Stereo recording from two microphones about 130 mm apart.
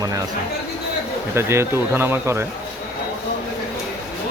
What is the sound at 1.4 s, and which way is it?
Speech, 20° right (ahead or behind).